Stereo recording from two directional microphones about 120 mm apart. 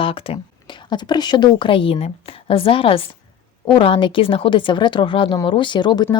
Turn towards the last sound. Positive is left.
turn(degrees=35)  # may be behind; listen again after turning